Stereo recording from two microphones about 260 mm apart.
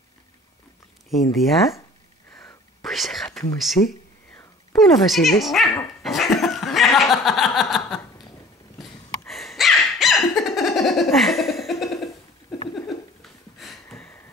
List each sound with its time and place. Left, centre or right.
1.3 s speech: centre
2.8 s whispering: centre
3.8 s speech: centre
4.7 s dog: centre
9.3 s dog: centre
10.3 s laughter: centre
12.7 s a sound: centre